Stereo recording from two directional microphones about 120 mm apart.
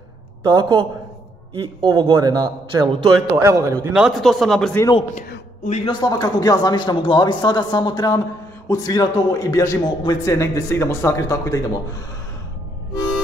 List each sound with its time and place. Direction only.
0.4 s a man's voice: 45° right (ahead or behind); by 3.9 s 25° right (ahead or behind)
3.9 s speech: 5° right (ahead or behind)
5.9 s a man's voice: 40° left (ahead or behind)